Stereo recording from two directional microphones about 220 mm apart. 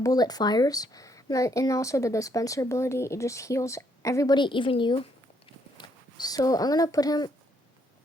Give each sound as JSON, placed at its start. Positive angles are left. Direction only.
{"t": 0.0, "sound": "speech", "side_deg": 15}